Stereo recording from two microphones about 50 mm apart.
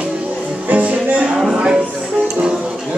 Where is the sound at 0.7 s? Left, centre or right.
Right.